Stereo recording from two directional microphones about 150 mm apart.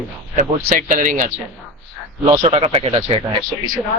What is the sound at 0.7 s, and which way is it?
Speech, 60° right (ahead or behind).